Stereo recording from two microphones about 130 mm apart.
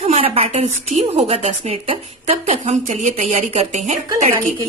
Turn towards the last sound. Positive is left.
turn(degrees=-80)